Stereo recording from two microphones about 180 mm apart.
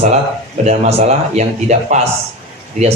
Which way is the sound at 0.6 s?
40° right (ahead or behind).